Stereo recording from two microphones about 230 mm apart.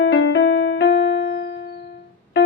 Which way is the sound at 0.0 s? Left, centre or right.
Left.